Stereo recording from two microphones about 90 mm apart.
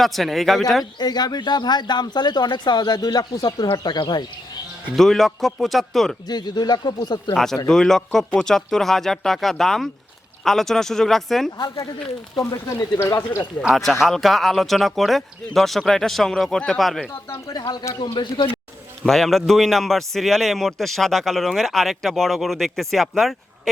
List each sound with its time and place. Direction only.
0.0 s a man's voice: centre (ahead or behind)
0.9 s speech: 50° left (ahead or behind)
3.7 s speech: 60° left (ahead or behind)
4.9 s a man's voice: 5° left (ahead or behind)
6.2 s speech: 50° left (ahead or behind)
7.3 s a man's voice: 5° left (ahead or behind)
12.6 s speech: 30° left (ahead or behind)
13.7 s a man's voice: centre (ahead or behind)
17.5 s speech: 50° left (ahead or behind)
18.0 s speech: 60° left (ahead or behind)
19.0 s a man's voice: 5° left (ahead or behind)